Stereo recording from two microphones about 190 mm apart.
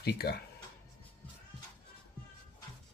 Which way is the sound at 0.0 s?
55° left (ahead or behind).